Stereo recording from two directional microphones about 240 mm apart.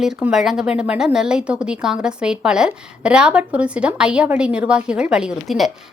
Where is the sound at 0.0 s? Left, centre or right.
Centre.